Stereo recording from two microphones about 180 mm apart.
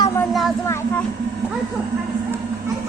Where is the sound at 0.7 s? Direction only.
15° left (ahead or behind).